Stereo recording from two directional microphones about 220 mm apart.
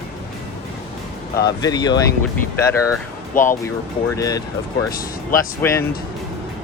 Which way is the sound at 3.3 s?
35° left (ahead or behind).